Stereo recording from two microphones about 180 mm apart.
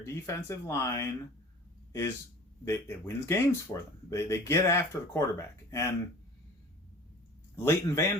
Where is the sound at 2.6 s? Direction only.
15° left (ahead or behind).